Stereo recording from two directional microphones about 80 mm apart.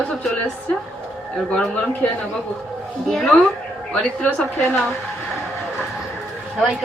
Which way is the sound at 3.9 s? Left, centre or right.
Centre.